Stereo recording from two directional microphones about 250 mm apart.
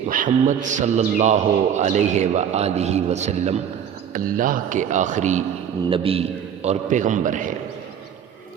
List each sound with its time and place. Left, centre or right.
0.1 s a man's voice: right